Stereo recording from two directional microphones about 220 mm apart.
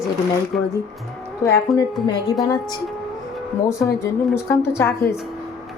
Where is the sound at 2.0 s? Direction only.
Centre (ahead or behind).